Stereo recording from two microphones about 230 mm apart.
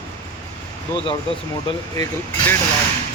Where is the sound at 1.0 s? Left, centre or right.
Left.